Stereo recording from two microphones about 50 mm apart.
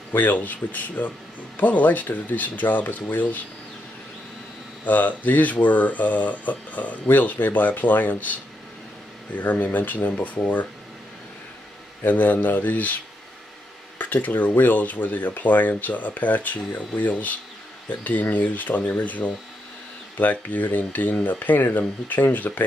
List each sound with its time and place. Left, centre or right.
0.1 s speech: left
4.8 s speech: left
12.0 s speech: left
13.9 s speech: left